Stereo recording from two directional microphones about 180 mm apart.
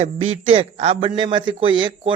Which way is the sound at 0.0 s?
35° right (ahead or behind).